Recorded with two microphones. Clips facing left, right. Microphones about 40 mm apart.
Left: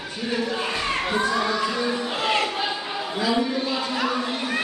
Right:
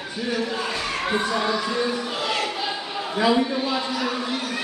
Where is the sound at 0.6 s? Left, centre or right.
Centre.